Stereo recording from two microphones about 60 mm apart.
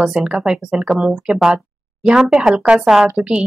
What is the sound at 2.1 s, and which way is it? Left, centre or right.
Speech, centre.